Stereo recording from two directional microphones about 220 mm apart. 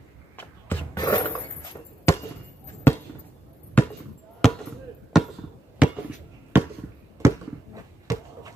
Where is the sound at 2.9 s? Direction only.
10° left (ahead or behind).